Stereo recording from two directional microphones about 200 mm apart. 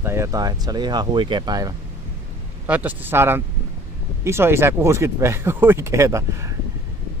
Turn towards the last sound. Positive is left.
turn(degrees=-15)  # may be behind; listen again after turning